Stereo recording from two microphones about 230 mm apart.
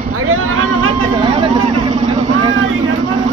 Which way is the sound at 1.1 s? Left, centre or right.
Centre.